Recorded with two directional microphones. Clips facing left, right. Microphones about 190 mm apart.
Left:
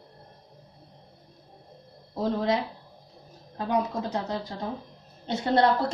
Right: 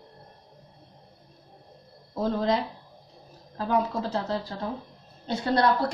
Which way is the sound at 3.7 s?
15° left (ahead or behind).